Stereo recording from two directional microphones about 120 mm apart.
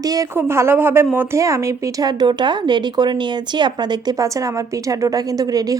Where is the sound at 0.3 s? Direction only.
20° right (ahead or behind).